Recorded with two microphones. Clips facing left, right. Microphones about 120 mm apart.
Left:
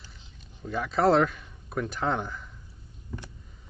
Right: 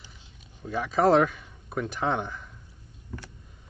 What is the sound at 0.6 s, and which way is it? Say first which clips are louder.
Speech: right 1 dB; 5° right (ahead or behind).